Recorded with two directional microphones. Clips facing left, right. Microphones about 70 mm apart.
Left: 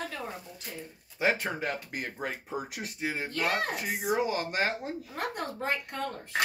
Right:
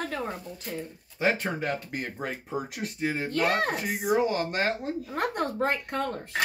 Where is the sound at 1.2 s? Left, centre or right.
Centre.